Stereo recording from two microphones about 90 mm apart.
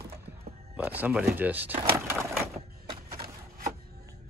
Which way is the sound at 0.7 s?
20° right (ahead or behind).